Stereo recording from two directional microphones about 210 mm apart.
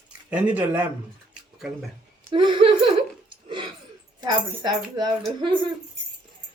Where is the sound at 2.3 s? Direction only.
25° right (ahead or behind).